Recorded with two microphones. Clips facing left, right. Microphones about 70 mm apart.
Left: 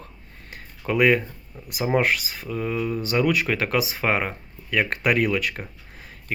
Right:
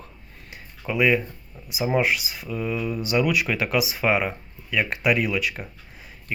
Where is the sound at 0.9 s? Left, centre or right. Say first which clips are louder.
Left 2 dB; left.